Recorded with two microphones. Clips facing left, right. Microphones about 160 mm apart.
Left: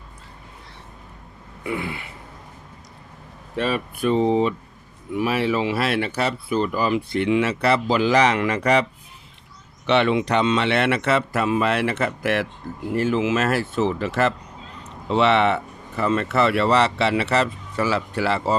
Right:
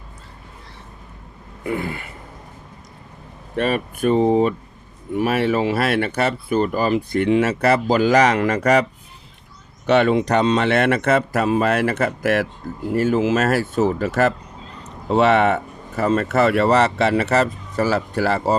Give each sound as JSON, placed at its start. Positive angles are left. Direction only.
{"t": 1.6, "sound": "speech", "side_deg": -45}
{"t": 3.5, "sound": "speech", "side_deg": -55}